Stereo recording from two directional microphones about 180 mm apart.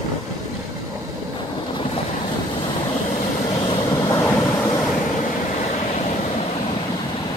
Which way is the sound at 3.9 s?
20° left (ahead or behind).